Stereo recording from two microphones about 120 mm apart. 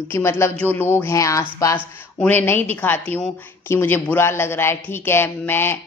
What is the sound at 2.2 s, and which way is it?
A woman's voice, 15° left (ahead or behind).